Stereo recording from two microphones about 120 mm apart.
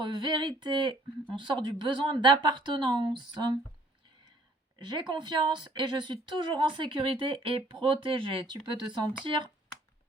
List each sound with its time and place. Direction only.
0.0 s speech: 40° right (ahead or behind)
4.8 s speech: 40° right (ahead or behind)